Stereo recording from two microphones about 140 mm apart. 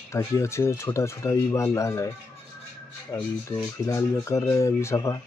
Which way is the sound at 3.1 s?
20° left (ahead or behind).